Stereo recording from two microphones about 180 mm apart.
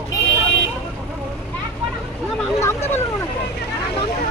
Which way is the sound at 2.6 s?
15° left (ahead or behind).